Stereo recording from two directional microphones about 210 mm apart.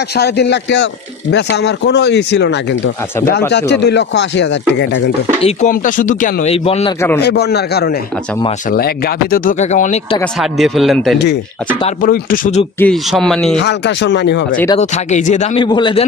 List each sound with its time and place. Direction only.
0.2 s speech: 55° left (ahead or behind)
5.4 s speech: 35° left (ahead or behind)
7.2 s speech: 50° left (ahead or behind); by 9.9 s 35° left (ahead or behind)
10.4 s speech: centre (ahead or behind)
11.8 s speech: 45° left (ahead or behind)
12.7 s speech: 5° left (ahead or behind)
13.6 s speech: 55° left (ahead or behind)
14.8 s speech: 35° left (ahead or behind)
15.6 s a man's voice: 20° left (ahead or behind)